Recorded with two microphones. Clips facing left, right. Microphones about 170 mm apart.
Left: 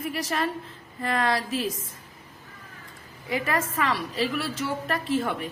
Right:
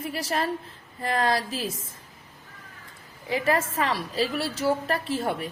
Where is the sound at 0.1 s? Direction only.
30° right (ahead or behind).